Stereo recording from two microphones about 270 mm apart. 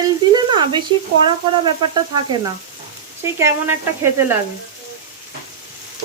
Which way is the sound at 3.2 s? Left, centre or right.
Centre.